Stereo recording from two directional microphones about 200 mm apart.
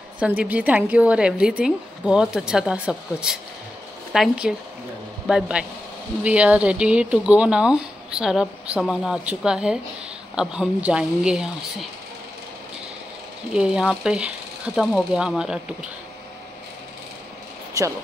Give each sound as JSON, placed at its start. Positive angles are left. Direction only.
{"t": 0.2, "sound": "speech", "side_deg": -5}
{"t": 13.5, "sound": "speech", "side_deg": -5}
{"t": 17.8, "sound": "speech", "side_deg": -15}